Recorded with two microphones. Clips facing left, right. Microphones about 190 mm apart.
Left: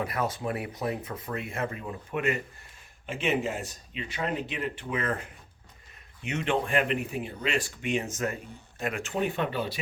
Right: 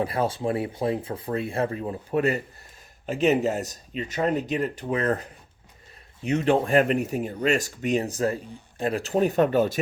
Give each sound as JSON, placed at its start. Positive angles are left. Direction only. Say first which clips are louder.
{"t": 0.0, "sound": "speech", "louder": "right 5 dB", "side_deg": -30}